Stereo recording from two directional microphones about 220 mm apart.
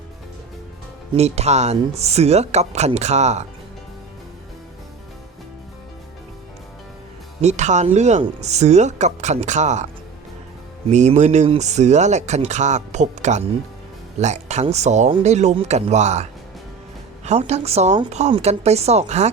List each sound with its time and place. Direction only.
1.1 s speech: 30° right (ahead or behind)
7.4 s speech: 30° right (ahead or behind)
10.9 s speech: 30° right (ahead or behind)
17.2 s speech: 30° right (ahead or behind)